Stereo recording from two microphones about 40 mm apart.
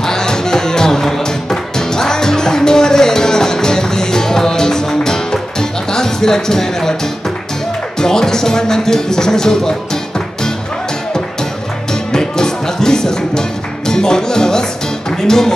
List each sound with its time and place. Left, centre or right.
0.0 s music: centre
8.0 s speech: centre
11.9 s music: centre